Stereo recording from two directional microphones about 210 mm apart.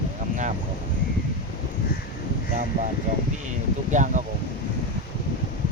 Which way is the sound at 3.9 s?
35° right (ahead or behind).